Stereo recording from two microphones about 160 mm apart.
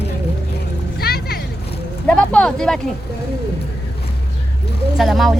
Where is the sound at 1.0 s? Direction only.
75° left (ahead or behind).